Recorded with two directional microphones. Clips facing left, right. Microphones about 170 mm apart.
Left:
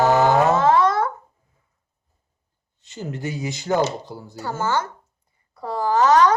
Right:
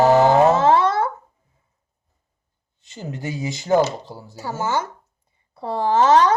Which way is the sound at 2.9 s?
20° right (ahead or behind).